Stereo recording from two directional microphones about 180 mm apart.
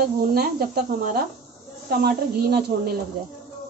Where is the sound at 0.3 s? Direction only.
55° right (ahead or behind).